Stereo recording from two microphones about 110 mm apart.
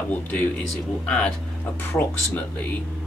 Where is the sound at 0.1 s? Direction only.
15° left (ahead or behind).